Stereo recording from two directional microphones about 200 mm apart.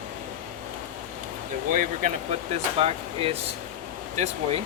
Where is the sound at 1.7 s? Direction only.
40° right (ahead or behind).